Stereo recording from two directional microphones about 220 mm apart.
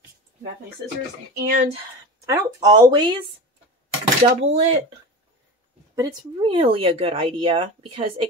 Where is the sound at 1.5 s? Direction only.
35° right (ahead or behind).